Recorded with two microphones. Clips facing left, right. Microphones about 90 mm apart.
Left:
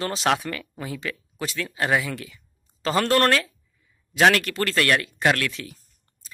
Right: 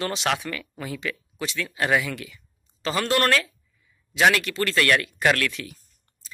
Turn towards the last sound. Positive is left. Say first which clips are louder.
# even
turn(degrees=30)  # may be behind; listen again after turning